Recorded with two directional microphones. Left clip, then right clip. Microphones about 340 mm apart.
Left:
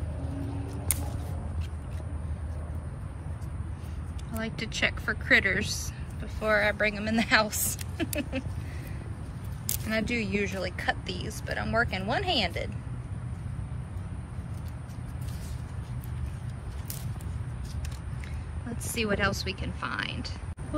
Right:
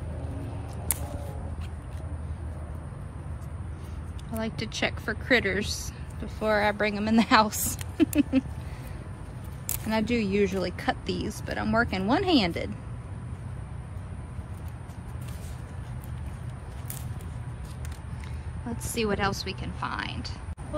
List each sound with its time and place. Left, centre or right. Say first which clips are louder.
4.4 s speech: even; centre
9.8 s speech: right 2 dB; centre
18.9 s speech: even; centre